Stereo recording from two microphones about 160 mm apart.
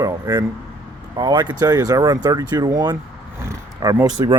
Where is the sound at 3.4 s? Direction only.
20° right (ahead or behind).